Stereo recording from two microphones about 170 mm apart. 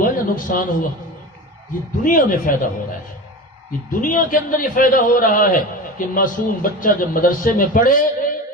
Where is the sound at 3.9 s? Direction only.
55° left (ahead or behind).